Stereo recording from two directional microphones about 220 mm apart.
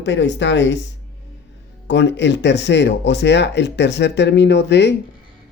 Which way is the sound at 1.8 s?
55° left (ahead or behind).